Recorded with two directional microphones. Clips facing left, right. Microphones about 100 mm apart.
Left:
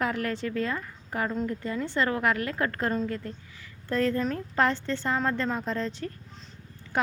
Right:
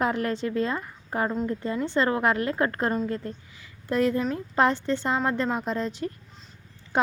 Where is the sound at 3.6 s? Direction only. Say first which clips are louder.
Right 3 dB; 15° right (ahead or behind).